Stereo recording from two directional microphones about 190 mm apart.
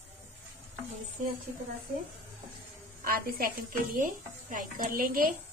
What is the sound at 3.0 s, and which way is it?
Speech, 50° right (ahead or behind).